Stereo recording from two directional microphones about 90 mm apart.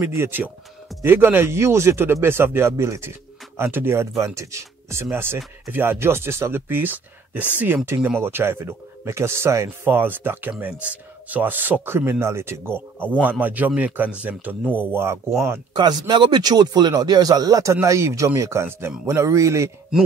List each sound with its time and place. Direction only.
0.0 s speech: 25° right (ahead or behind)
15.7 s speech: 55° right (ahead or behind); by 19.7 s 35° right (ahead or behind)